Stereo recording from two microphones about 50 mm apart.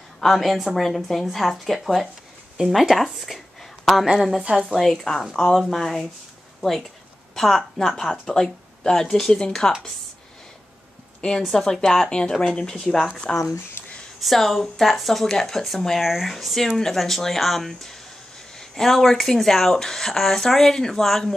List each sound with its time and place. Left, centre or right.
0.2 s a woman's voice: centre
4.4 s a woman's voice: centre
4.6 s speech: centre
11.1 s a woman's voice: centre
14.2 s speech: centre